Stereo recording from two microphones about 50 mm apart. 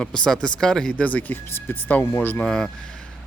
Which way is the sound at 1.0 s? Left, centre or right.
Left.